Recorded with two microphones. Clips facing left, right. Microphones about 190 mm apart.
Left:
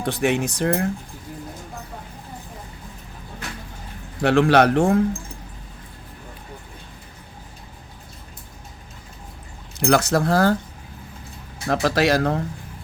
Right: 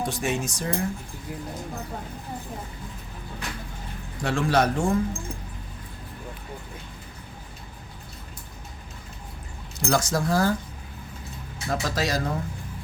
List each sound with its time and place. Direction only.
0.0 s speech: 65° left (ahead or behind)
4.2 s speech: 65° left (ahead or behind)
9.8 s speech: 65° left (ahead or behind)
11.7 s speech: 70° left (ahead or behind)